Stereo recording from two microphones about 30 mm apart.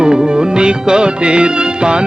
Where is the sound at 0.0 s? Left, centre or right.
Right.